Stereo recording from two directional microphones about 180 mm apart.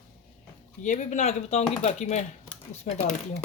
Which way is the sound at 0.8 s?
45° left (ahead or behind).